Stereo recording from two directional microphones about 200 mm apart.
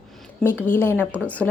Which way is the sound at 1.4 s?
Centre (ahead or behind).